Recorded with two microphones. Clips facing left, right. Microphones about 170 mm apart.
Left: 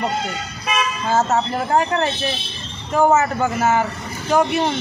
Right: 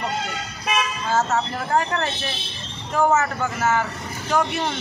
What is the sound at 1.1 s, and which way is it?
Speech, 20° left (ahead or behind).